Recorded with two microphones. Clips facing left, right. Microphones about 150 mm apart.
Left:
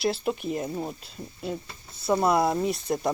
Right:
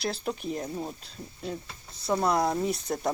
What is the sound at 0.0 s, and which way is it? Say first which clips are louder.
Speech: left 5 dB; 5° left (ahead or behind).